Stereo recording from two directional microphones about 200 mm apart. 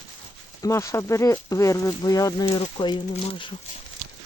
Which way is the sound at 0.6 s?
15° left (ahead or behind).